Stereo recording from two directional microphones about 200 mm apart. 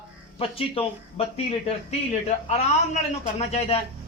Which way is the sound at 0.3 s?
30° left (ahead or behind).